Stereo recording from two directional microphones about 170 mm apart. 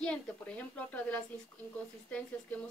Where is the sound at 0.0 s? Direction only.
5° left (ahead or behind).